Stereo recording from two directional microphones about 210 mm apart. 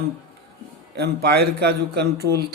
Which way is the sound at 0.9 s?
50° right (ahead or behind).